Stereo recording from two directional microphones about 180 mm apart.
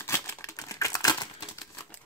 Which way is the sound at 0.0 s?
15° left (ahead or behind).